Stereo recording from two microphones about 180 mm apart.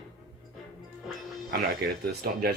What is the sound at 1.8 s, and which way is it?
Speech, 60° right (ahead or behind).